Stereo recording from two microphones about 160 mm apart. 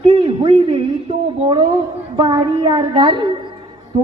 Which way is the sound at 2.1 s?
30° right (ahead or behind).